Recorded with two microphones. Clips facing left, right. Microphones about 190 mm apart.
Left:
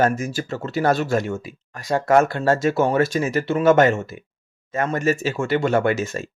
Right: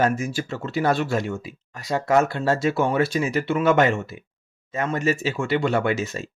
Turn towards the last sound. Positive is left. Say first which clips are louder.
# left 3 dB
turn(degrees=50)  # may be behind; listen again after turning